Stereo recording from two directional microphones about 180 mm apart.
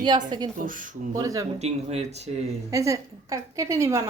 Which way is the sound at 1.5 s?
35° right (ahead or behind).